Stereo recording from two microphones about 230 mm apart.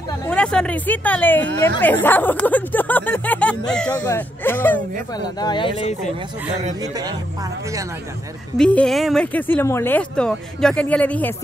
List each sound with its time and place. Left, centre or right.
0.3 s speech: centre
5.4 s speech: left
6.8 s speech: centre
8.5 s speech: centre